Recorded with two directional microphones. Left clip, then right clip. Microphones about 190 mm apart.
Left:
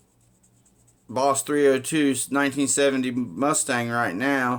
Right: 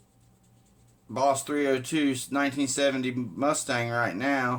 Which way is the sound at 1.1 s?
40° left (ahead or behind).